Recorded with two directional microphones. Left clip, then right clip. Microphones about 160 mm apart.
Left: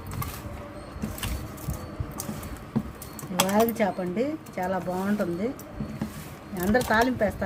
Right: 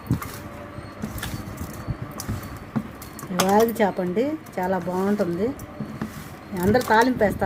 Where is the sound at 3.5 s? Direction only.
45° right (ahead or behind).